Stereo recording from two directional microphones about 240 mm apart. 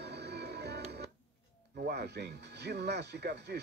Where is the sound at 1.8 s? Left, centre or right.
Right.